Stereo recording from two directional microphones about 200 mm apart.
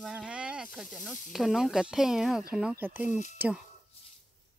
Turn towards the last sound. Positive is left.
turn(degrees=-5)  # may be behind; listen again after turning